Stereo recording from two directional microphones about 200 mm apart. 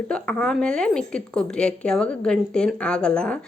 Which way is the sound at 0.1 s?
5° left (ahead or behind).